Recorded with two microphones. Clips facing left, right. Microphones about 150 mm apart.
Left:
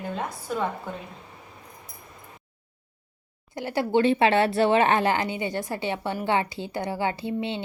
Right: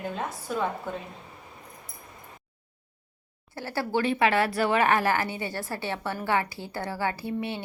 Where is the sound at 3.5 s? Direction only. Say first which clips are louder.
Left 5 dB; 20° left (ahead or behind).